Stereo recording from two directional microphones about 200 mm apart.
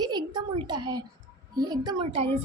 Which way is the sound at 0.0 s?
20° right (ahead or behind).